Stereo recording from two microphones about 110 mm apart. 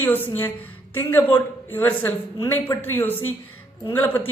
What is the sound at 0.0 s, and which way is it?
A woman's voice, 15° left (ahead or behind).